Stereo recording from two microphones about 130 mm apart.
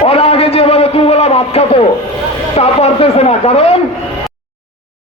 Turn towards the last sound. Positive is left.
turn(degrees=50)  # may be behind; listen again after turning